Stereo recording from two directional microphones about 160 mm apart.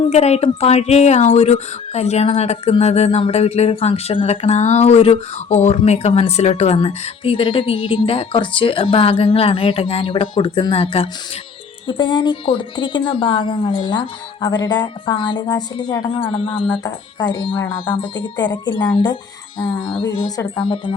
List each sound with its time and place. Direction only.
0.0 s speech: 40° left (ahead or behind); by 16.0 s 25° left (ahead or behind)
16.1 s speech: 35° left (ahead or behind)